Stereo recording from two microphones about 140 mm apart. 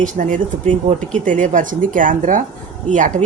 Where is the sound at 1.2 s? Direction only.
65° right (ahead or behind).